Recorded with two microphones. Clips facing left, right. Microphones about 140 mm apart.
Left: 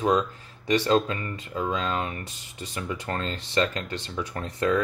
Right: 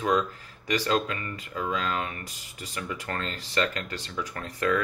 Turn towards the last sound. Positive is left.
turn(degrees=25)  # may be behind; listen again after turning